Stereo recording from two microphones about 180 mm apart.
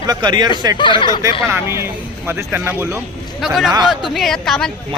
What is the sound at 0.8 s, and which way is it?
Speech, 25° left (ahead or behind).